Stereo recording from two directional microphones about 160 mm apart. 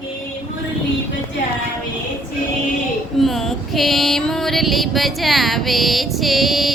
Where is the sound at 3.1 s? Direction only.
Centre (ahead or behind).